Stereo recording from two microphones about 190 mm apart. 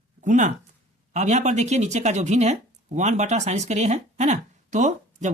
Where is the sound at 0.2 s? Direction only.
40° right (ahead or behind).